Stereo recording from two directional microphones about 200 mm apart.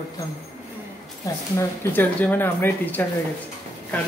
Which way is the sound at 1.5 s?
10° left (ahead or behind).